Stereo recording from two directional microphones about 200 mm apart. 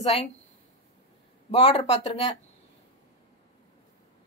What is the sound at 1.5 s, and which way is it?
Speech, 30° left (ahead or behind).